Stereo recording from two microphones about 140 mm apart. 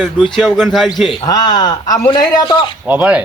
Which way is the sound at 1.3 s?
30° left (ahead or behind).